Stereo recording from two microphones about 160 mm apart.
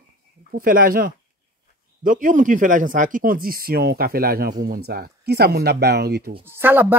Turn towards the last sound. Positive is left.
turn(degrees=-10)  # may be behind; listen again after turning